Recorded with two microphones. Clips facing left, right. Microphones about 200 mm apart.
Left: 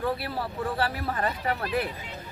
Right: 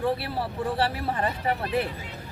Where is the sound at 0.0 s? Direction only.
30° right (ahead or behind).